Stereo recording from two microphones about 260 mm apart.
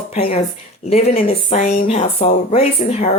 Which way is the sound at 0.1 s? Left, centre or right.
Left.